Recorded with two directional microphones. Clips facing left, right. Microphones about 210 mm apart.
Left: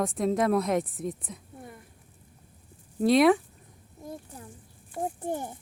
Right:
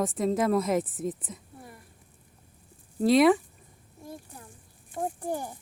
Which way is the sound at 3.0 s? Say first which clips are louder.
Even; centre (ahead or behind).